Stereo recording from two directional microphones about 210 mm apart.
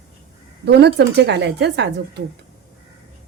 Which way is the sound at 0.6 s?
55° right (ahead or behind).